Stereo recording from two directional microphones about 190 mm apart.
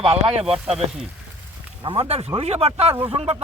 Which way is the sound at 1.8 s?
30° right (ahead or behind).